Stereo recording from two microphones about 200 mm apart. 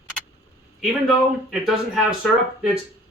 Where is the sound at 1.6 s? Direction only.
Centre (ahead or behind).